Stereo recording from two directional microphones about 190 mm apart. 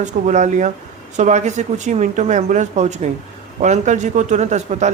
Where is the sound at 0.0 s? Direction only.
40° right (ahead or behind).